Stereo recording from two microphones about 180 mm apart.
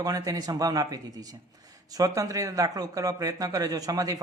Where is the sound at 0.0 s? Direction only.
20° right (ahead or behind).